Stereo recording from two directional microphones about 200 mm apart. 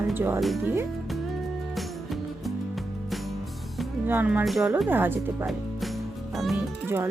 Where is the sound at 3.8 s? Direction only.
10° right (ahead or behind).